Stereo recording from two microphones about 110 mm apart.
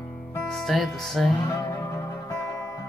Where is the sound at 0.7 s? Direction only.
Centre (ahead or behind).